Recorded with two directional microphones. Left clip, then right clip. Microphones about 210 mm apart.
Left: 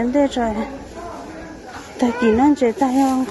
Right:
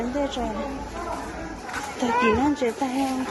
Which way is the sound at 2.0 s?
30° left (ahead or behind).